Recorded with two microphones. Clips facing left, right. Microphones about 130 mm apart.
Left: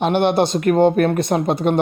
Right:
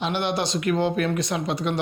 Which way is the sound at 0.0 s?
55° left (ahead or behind).